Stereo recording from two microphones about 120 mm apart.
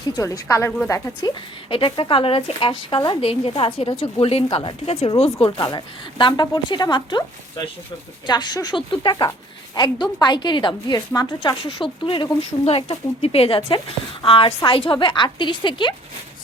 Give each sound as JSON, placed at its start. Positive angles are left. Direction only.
{"t": 0.1, "sound": "a woman's voice", "side_deg": 25}
{"t": 1.7, "sound": "a woman's voice", "side_deg": 45}
{"t": 5.5, "sound": "a woman's voice", "side_deg": 35}
{"t": 8.3, "sound": "a woman's voice", "side_deg": 35}
{"t": 13.7, "sound": "a woman's voice", "side_deg": 40}